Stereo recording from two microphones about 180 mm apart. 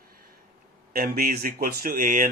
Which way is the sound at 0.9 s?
55° right (ahead or behind).